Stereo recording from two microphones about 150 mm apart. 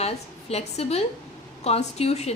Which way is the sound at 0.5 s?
45° left (ahead or behind).